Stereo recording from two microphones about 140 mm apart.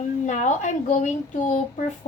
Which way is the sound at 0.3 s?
60° left (ahead or behind).